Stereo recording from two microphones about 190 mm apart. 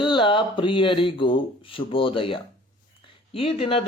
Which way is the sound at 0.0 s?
25° left (ahead or behind).